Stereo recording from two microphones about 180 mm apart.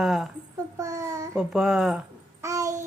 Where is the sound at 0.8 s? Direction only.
15° right (ahead or behind).